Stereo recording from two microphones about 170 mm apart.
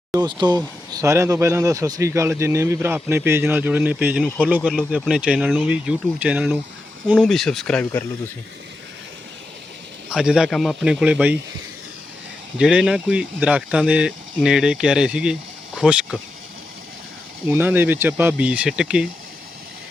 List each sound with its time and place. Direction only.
0.1 s speech: 25° right (ahead or behind); by 8.0 s 5° left (ahead or behind)
10.1 s speech: 5° right (ahead or behind)
12.5 s speech: 5° right (ahead or behind)
17.5 s speech: 10° right (ahead or behind)